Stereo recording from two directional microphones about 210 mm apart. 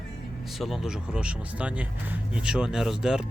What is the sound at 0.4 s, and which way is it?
Speech, centre (ahead or behind).